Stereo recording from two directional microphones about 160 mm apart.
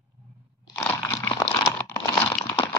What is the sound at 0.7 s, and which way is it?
Crunch, 15° left (ahead or behind).